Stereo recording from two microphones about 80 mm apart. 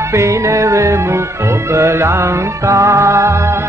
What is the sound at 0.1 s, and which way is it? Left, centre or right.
Music, right.